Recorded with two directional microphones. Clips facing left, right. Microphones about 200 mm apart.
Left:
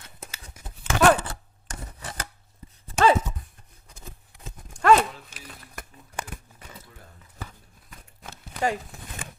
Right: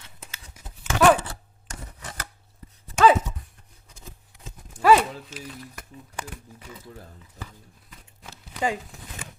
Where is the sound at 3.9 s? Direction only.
55° left (ahead or behind).